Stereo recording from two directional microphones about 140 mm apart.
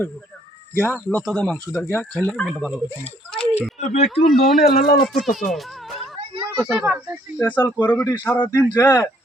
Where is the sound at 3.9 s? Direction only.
50° left (ahead or behind).